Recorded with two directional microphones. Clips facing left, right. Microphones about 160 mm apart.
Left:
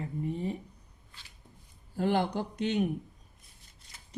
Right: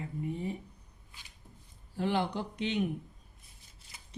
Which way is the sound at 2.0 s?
45° left (ahead or behind).